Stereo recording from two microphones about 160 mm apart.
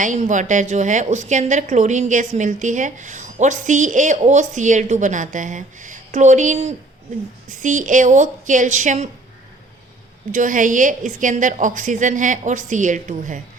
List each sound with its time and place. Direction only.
0.0 s a woman's voice: 50° right (ahead or behind)
10.3 s a woman's voice: 55° right (ahead or behind)